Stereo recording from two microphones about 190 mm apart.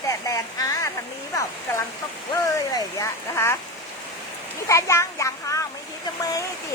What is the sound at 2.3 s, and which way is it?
Speech, 15° left (ahead or behind).